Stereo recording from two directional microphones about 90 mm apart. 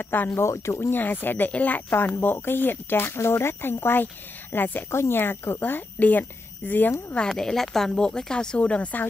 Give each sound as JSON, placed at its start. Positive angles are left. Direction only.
{"t": 0.0, "sound": "speech", "side_deg": 20}
{"t": 7.2, "sound": "speech", "side_deg": 5}